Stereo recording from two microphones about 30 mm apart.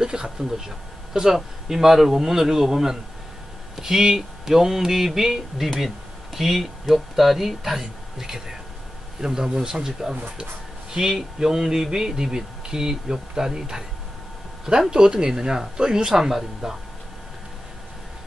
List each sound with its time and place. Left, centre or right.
0.0 s speech: right
16.3 s speech: centre